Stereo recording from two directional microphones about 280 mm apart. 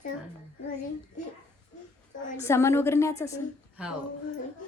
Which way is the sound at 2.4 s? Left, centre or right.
Centre.